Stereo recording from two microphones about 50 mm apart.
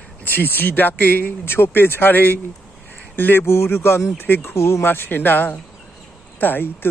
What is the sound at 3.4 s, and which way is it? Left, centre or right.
Speech, left.